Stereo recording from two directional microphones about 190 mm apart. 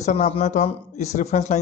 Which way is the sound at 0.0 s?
35° left (ahead or behind).